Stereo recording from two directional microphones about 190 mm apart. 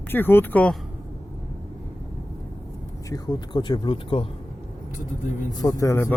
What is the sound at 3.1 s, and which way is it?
Speech, 20° left (ahead or behind).